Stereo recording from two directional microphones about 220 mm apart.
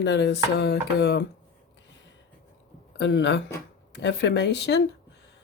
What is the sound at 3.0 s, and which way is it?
Speech, 50° left (ahead or behind).